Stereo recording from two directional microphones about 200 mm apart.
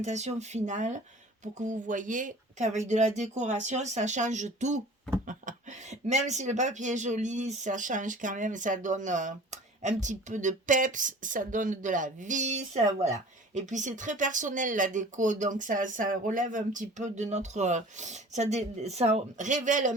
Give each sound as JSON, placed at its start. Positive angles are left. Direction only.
{"t": 0.0, "sound": "speech", "side_deg": -35}